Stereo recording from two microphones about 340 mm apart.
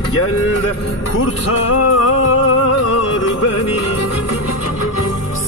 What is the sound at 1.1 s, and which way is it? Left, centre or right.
Music, left.